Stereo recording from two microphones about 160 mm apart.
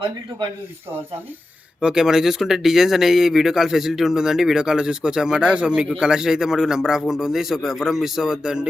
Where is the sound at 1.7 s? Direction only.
5° right (ahead or behind).